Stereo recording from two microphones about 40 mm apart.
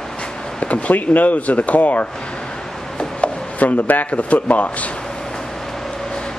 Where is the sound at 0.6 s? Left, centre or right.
Left.